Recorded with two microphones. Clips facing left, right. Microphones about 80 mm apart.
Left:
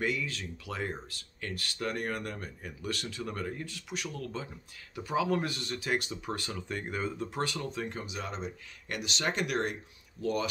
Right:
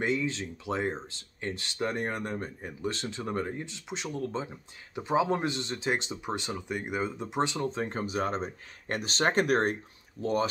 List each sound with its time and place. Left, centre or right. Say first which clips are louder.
0.0 s speech: right 4 dB; right